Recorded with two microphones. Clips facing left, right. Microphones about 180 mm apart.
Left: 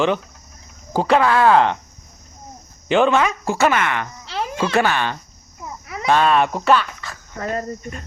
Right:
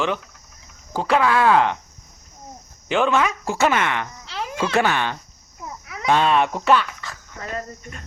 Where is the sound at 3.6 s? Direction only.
20° right (ahead or behind).